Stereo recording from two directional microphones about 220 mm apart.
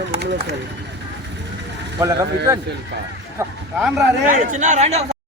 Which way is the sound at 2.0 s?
15° right (ahead or behind).